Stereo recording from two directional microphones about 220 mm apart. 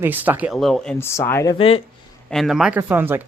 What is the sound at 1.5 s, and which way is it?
Speech, 25° left (ahead or behind).